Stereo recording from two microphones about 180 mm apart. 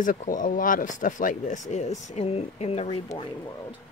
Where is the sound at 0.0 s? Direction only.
45° left (ahead or behind).